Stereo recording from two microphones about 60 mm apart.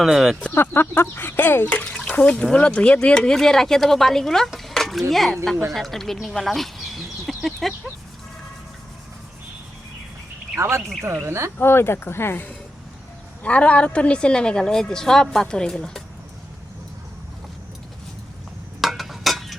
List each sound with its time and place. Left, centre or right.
0.0 s speech: centre
0.5 s speech: left
1.9 s water: centre
2.3 s a woman's voice: centre
6.3 s a sound: centre
10.6 s speech: right
11.5 s speech: left
13.4 s a woman's voice: left
18.8 s a sound: centre